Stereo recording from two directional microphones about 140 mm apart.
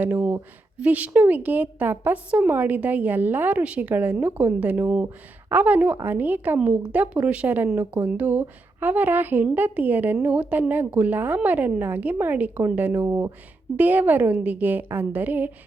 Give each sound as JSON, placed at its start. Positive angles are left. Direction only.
{"t": 0.0, "sound": "a woman's voice", "side_deg": -10}